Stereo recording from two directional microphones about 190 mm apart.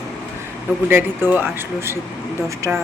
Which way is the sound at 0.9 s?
10° right (ahead or behind).